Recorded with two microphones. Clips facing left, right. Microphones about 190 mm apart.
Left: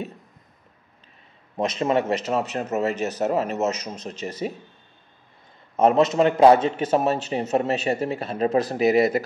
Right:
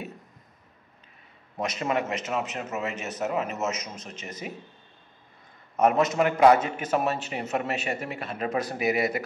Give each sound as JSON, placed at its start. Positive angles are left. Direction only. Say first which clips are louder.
{"t": 1.6, "sound": "a man's voice", "louder": "left 6 dB", "side_deg": 30}
{"t": 5.8, "sound": "a man's voice", "louder": "left 4 dB", "side_deg": 30}